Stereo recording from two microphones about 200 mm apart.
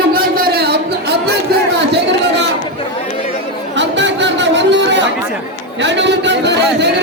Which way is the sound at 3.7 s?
65° right (ahead or behind).